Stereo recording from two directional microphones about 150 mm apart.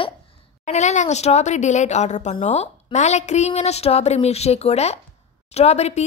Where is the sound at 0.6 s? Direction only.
50° left (ahead or behind).